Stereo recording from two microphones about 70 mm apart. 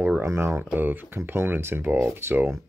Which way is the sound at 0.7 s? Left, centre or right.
Right.